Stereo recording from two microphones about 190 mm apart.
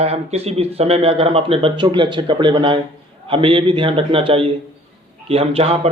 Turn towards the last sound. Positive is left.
turn(degrees=-30)  # may be behind; listen again after turning